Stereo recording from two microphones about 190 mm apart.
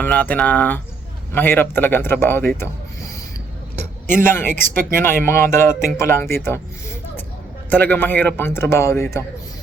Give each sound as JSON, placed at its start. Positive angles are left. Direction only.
{"t": 0.0, "sound": "a man's voice", "side_deg": 10}
{"t": 4.2, "sound": "a man's voice", "side_deg": 10}
{"t": 4.6, "sound": "speech", "side_deg": -45}
{"t": 4.9, "sound": "a man's voice", "side_deg": 15}
{"t": 7.7, "sound": "a man's voice", "side_deg": 10}